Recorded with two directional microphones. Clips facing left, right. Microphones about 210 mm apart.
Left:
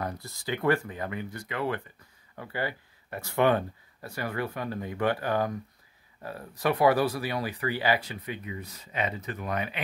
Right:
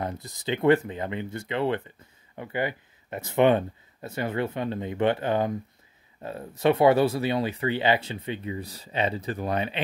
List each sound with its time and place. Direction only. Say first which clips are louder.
0.0 s speech: right 3 dB; 20° right (ahead or behind)